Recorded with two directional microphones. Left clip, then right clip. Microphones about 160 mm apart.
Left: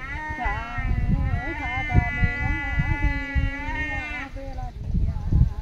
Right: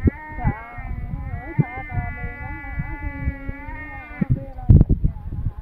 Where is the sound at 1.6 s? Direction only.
15° left (ahead or behind).